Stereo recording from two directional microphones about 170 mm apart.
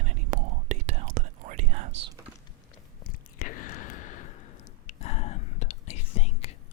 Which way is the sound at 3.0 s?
55° left (ahead or behind).